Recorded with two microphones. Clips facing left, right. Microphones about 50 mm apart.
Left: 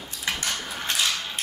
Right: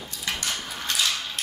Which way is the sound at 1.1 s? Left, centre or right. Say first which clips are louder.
Left 1 dB; centre.